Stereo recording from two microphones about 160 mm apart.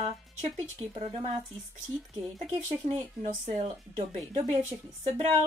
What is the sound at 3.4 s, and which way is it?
Speech, 35° right (ahead or behind).